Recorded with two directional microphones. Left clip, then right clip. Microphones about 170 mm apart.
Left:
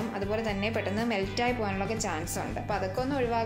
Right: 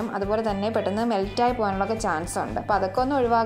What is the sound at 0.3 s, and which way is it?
A woman's voice, 30° right (ahead or behind).